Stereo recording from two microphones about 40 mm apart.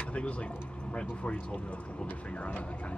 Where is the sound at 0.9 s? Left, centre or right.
Left.